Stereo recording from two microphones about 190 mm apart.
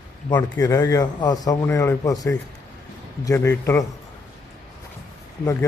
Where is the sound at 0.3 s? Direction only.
15° left (ahead or behind).